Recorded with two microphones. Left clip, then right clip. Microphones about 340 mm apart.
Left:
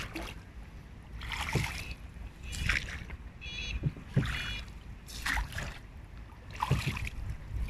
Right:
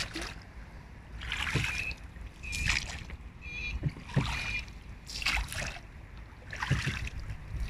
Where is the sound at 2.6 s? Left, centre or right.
Centre.